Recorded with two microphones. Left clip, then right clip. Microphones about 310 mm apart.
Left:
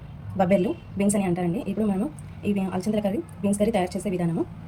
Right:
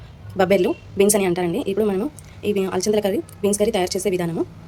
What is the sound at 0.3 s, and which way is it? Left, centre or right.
Speech, centre.